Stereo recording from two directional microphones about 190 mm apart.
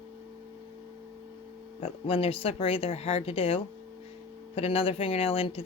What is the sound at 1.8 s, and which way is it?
Speech, 30° left (ahead or behind).